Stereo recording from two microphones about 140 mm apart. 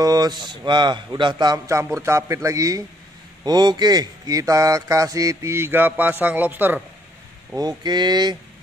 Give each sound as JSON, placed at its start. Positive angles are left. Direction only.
{"t": 0.0, "sound": "a man's voice", "side_deg": -30}
{"t": 7.5, "sound": "a man's voice", "side_deg": -30}